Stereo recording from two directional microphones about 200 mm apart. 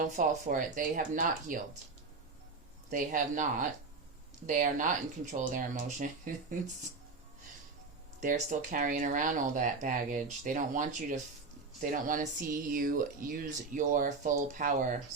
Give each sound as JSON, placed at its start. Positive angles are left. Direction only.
{"t": 0.0, "sound": "speech", "side_deg": -40}
{"t": 2.9, "sound": "speech", "side_deg": -40}
{"t": 8.2, "sound": "speech", "side_deg": -40}